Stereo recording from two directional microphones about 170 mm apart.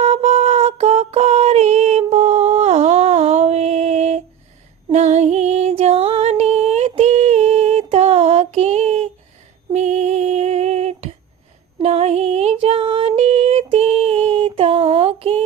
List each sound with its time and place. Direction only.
0.0 s a sound: 40° right (ahead or behind)
4.9 s music: 40° right (ahead or behind)
9.7 s female singing: 45° right (ahead or behind)